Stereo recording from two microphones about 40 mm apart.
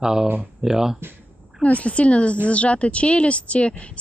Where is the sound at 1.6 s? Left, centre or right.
Left.